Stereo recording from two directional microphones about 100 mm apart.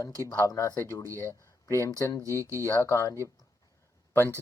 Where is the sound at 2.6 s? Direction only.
25° left (ahead or behind).